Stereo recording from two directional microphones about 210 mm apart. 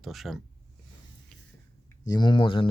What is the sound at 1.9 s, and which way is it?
Speech, 20° left (ahead or behind).